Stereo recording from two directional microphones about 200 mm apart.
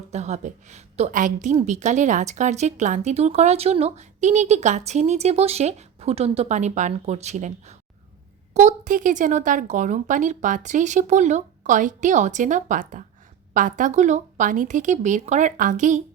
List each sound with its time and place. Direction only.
0.1 s a woman's voice: 35° right (ahead or behind)